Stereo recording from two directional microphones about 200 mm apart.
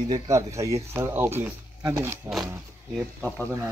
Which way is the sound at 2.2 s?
Centre (ahead or behind).